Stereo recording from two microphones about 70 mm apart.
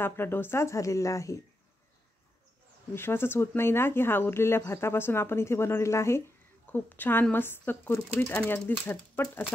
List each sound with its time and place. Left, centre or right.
0.0 s speech: left
2.9 s speech: left
6.7 s speech: left